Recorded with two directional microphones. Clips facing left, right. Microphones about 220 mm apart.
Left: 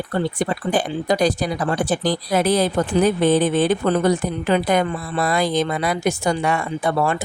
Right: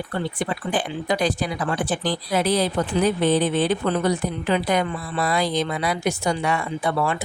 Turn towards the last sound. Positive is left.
turn(degrees=45)  # may be behind; listen again after turning